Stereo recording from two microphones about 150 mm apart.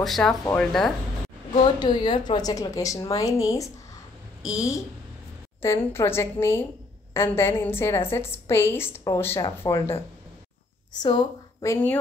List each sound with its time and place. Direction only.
0.0 s speech: 5° left (ahead or behind)
1.8 s a woman's voice: 30° left (ahead or behind)
11.0 s speech: 30° left (ahead or behind)